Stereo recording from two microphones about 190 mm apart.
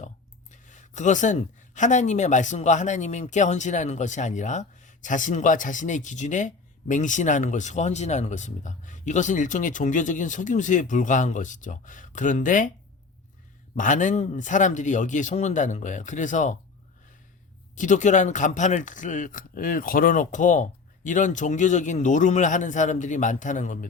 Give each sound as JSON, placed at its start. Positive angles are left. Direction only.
{"t": 0.5, "sound": "speech", "side_deg": 40}
{"t": 13.7, "sound": "speech", "side_deg": 40}
{"t": 17.7, "sound": "speech", "side_deg": 40}